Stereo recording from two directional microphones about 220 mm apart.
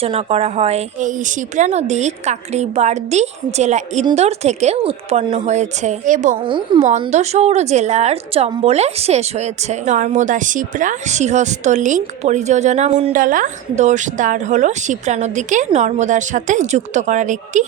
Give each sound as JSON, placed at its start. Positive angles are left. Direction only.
{"t": 0.0, "sound": "a woman's voice", "side_deg": -25}